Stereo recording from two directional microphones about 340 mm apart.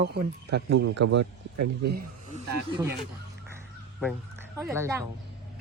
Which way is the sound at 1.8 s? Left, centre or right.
Right.